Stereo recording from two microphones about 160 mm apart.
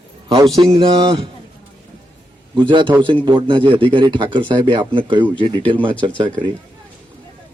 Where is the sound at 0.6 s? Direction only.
35° right (ahead or behind).